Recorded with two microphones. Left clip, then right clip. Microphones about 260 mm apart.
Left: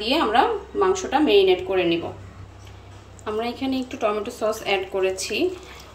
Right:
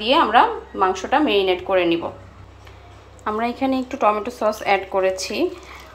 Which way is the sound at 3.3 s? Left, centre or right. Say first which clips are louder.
Right 4 dB; right.